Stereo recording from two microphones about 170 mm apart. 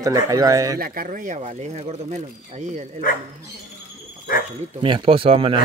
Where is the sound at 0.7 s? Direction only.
60° right (ahead or behind).